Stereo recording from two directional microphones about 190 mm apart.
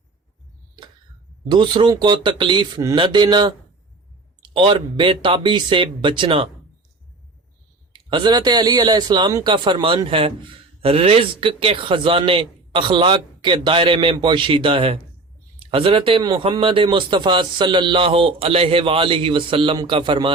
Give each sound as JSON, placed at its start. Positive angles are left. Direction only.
{"t": 1.5, "sound": "speech", "side_deg": -25}
{"t": 7.9, "sound": "speech", "side_deg": -25}